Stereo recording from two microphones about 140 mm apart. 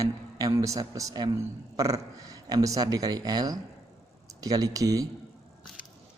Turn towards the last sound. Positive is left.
turn(degrees=-25)  # may be behind; listen again after turning